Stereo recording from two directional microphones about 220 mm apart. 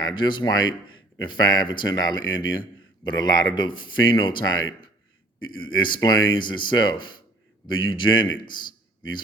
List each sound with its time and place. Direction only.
0.0 s speech: 20° left (ahead or behind)
2.1 s speech: 60° left (ahead or behind)
2.4 s speech: 20° left (ahead or behind)
5.7 s speech: 20° left (ahead or behind)
8.4 s a sound: 20° left (ahead or behind)